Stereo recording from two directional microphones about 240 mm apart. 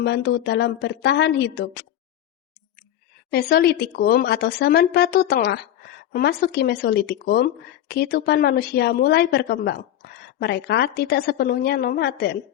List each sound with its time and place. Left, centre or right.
0.0 s a woman's voice: left
3.3 s speech: left